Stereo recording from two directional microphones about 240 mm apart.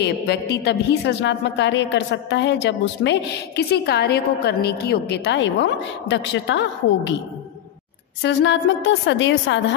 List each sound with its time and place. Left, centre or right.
0.0 s a woman's voice: left
8.2 s a woman's voice: left